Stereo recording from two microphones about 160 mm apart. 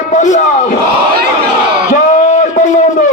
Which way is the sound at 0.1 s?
50° left (ahead or behind).